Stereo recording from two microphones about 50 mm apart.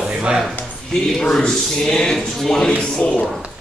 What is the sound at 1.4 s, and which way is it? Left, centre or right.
Speech, centre.